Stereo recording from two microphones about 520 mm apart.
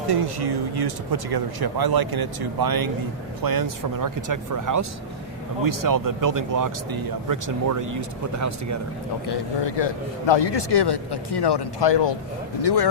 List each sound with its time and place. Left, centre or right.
0.1 s speech: right
9.2 s a man's voice: left